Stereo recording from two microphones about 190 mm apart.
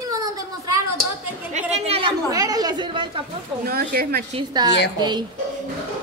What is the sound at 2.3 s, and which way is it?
Chatter, 20° right (ahead or behind).